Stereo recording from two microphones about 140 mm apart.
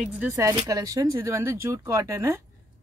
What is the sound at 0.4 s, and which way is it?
Speech, 25° right (ahead or behind).